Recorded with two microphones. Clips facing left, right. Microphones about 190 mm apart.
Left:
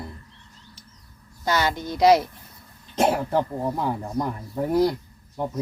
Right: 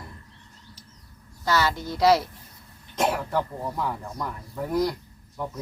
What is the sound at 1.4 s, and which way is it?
Speech, 20° left (ahead or behind).